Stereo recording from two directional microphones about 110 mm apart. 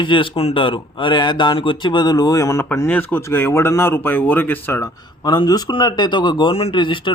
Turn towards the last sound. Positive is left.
turn(degrees=50)  # may be behind; listen again after turning